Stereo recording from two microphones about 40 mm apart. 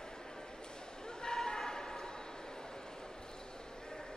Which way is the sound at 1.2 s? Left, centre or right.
Centre.